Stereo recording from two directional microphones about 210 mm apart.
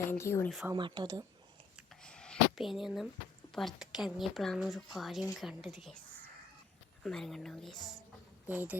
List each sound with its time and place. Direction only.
0.1 s speech: 10° left (ahead or behind)
0.7 s speech: 20° right (ahead or behind)
1.9 s a sound: 5° left (ahead or behind)
3.5 s a woman's voice: centre (ahead or behind)